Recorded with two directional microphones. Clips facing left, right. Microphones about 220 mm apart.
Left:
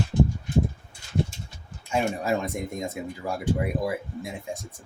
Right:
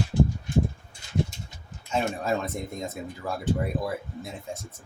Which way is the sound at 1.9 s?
10° left (ahead or behind).